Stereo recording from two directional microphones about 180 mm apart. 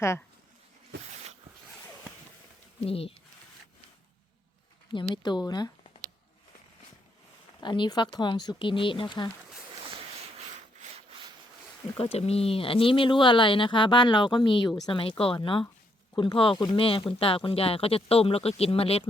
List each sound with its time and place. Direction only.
2.8 s speech: 30° left (ahead or behind)
5.1 s speech: 25° left (ahead or behind)
7.6 s speech: 25° left (ahead or behind)
11.9 s speech: 35° left (ahead or behind)